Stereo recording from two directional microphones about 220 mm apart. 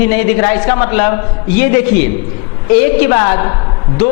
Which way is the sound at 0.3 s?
15° left (ahead or behind).